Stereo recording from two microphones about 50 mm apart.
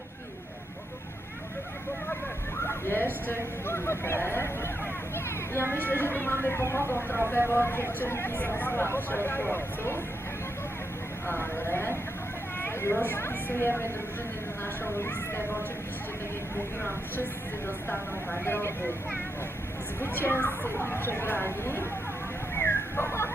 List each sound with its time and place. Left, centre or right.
2.6 s a sound: left
3.2 s speech: left
5.8 s speech: left
6.6 s speech: left
11.3 s speech: left
12.5 s a sound: left
13.1 s speech: left
14.9 s speech: left
18.4 s speech: left
20.0 s speech: left
22.5 s a sound: left